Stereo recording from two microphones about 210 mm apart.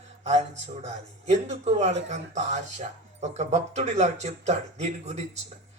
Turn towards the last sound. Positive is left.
turn(degrees=-30)  # may be behind; listen again after turning